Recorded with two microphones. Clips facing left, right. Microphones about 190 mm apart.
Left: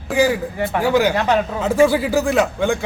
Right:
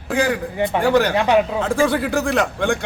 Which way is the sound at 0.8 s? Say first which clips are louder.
Left 1 dB; 5° left (ahead or behind).